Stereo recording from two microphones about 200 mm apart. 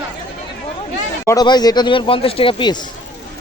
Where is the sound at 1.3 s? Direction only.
20° left (ahead or behind).